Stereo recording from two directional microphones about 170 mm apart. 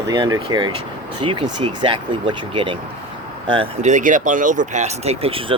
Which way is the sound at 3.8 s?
45° right (ahead or behind).